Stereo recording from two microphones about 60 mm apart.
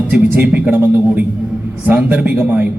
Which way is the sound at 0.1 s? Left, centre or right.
Right.